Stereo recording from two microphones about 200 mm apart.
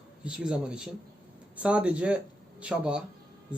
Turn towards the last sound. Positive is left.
turn(degrees=-5)  # may be behind; listen again after turning